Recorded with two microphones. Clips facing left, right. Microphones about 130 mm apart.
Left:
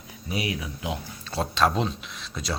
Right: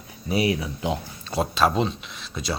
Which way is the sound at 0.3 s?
30° right (ahead or behind).